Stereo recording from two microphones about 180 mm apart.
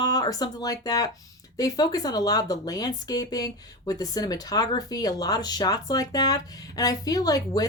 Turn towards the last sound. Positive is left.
turn(degrees=20)  # may be behind; listen again after turning